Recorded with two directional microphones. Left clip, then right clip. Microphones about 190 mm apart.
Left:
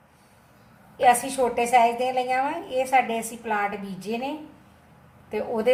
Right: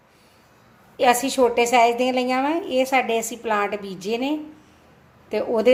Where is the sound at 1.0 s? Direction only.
55° right (ahead or behind).